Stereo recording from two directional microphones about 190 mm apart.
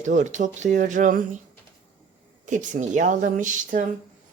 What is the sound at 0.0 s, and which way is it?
Speech, 40° right (ahead or behind).